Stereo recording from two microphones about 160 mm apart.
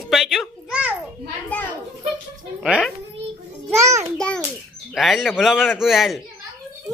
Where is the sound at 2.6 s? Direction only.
5° right (ahead or behind).